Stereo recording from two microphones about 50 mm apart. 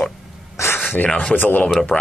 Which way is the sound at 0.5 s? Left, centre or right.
Left.